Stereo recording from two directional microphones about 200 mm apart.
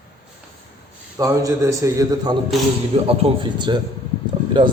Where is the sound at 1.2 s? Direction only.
15° right (ahead or behind).